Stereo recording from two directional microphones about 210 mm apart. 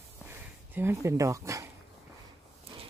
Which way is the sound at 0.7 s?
10° right (ahead or behind).